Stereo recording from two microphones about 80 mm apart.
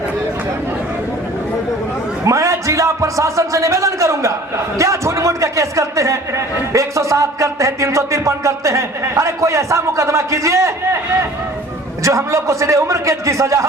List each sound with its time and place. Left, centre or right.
2.2 s a man's voice: right
12.0 s a man's voice: right